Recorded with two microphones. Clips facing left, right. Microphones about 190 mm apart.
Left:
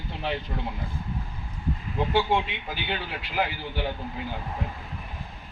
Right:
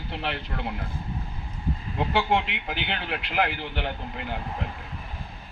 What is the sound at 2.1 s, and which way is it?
A man's voice, 70° right (ahead or behind).